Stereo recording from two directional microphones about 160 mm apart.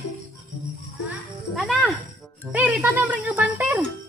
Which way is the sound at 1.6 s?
5° right (ahead or behind).